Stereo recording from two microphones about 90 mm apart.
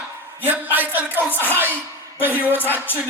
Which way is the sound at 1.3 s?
20° left (ahead or behind).